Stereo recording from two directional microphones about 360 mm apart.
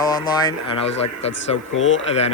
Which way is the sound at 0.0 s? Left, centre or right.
Centre.